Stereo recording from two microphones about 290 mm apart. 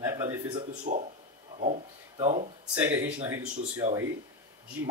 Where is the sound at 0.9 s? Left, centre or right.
Right.